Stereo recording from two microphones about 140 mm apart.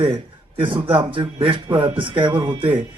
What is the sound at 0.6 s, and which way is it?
A man's voice, 40° right (ahead or behind).